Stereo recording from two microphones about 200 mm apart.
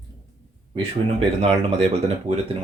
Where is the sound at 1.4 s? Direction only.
35° right (ahead or behind).